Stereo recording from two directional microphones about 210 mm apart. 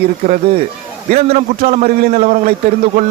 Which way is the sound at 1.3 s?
30° right (ahead or behind).